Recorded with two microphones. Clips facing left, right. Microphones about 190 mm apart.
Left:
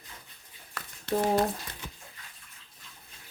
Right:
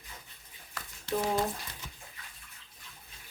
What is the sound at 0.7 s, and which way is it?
Crumpling, 65° left (ahead or behind).